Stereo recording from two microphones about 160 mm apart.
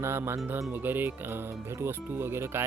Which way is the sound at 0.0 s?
15° right (ahead or behind).